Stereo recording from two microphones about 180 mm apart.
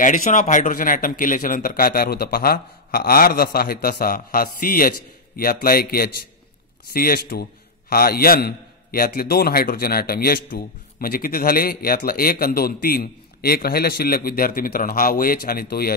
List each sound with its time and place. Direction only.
0.0 s a man's voice: 45° left (ahead or behind)